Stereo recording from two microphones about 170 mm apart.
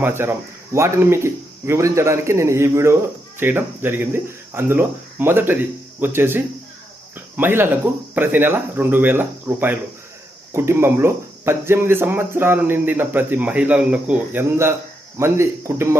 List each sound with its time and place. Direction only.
0.0 s speech: 15° right (ahead or behind)